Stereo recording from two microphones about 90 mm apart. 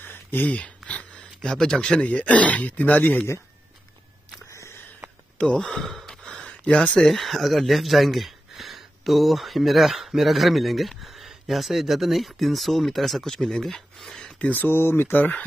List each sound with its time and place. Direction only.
0.0 s speech: 20° left (ahead or behind)
4.5 s a sound: 35° left (ahead or behind)
5.4 s gasp: 10° left (ahead or behind)
7.1 s speech: centre (ahead or behind)
14.2 s speech: 15° left (ahead or behind)